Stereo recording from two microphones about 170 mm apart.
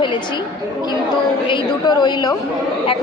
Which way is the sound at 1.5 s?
25° left (ahead or behind).